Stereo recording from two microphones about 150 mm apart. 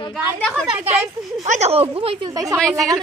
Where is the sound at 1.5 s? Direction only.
45° right (ahead or behind).